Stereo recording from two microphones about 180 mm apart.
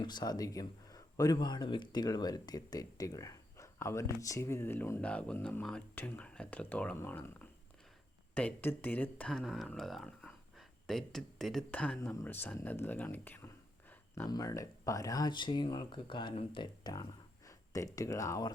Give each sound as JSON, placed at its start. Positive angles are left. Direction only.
{"t": 0.0, "sound": "speech", "side_deg": 25}